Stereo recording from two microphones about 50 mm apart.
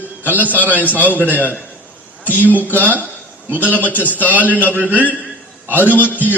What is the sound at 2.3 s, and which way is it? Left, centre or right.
Speech, left.